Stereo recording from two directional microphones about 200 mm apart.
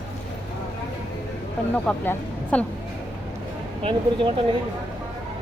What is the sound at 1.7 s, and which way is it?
Speech, 10° left (ahead or behind).